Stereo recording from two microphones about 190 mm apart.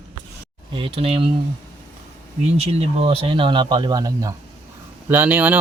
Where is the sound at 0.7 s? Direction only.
30° right (ahead or behind).